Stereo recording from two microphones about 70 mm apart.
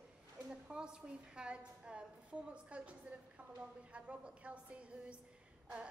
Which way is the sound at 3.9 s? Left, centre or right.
Centre.